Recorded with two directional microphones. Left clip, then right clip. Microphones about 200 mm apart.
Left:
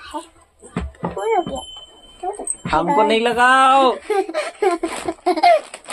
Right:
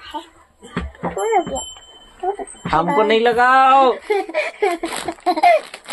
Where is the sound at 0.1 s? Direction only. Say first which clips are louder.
Even; 25° left (ahead or behind).